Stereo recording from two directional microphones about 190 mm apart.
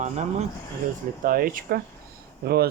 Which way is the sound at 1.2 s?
50° right (ahead or behind).